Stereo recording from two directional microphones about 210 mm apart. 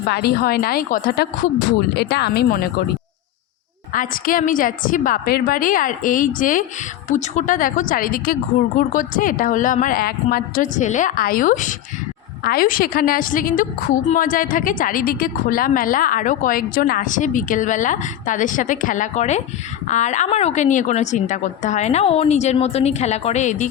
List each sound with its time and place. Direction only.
0.1 s a woman's voice: 50° left (ahead or behind)
3.9 s a woman's voice: 40° left (ahead or behind)